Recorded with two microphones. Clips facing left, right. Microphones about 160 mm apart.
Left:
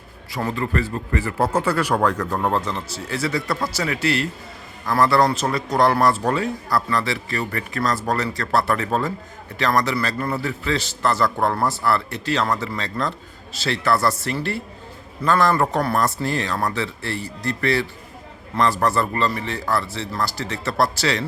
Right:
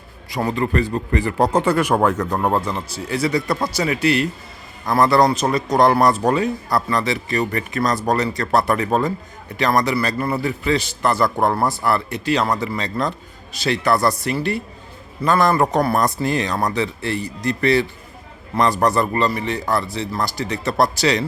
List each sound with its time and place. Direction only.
0.3 s a man's voice: 15° right (ahead or behind)